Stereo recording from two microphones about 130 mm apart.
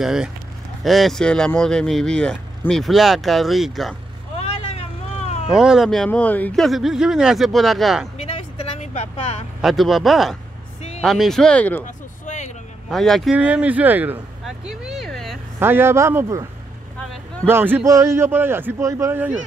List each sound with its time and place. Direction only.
0.0 s speech: 5° right (ahead or behind)
4.4 s vehicle: 55° left (ahead or behind)
5.5 s speech: 5° right (ahead or behind); by 6.6 s 10° left (ahead or behind)
6.6 s speech: centre (ahead or behind)
8.5 s vehicle: 60° left (ahead or behind)
9.6 s speech: centre (ahead or behind)
11.8 s a sound: 70° left (ahead or behind)
12.9 s speech: centre (ahead or behind)
13.3 s speech: 10° right (ahead or behind)
14.4 s vehicle: centre (ahead or behind)
15.6 s a man's voice: 20° right (ahead or behind)
17.5 s a man's voice: 15° right (ahead or behind)